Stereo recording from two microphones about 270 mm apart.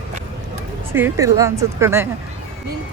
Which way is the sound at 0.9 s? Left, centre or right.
Centre.